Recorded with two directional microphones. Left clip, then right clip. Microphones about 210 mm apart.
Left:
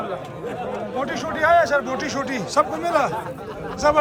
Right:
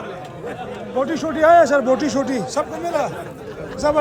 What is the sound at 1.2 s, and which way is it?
Speech, 35° right (ahead or behind).